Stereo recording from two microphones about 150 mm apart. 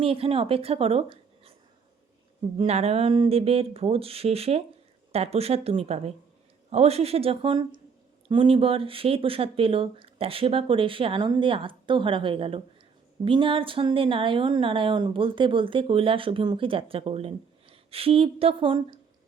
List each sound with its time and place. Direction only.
0.0 s a woman's voice: 40° right (ahead or behind)
2.6 s speech: 45° right (ahead or behind)